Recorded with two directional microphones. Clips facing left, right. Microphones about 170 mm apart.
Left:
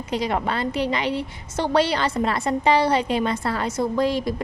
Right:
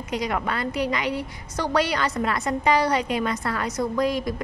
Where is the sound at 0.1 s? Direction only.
30° left (ahead or behind).